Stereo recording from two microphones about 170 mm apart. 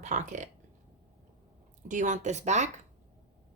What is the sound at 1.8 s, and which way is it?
Speech, 45° right (ahead or behind).